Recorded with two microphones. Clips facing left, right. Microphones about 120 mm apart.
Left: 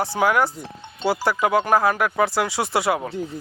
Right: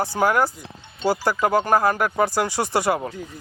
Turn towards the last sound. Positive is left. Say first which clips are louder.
# even
turn(degrees=0)  # may be behind; listen again after turning